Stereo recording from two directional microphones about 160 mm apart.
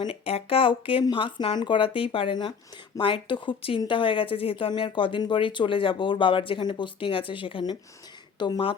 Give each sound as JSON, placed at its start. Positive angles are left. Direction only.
{"t": 0.0, "sound": "speech", "side_deg": 35}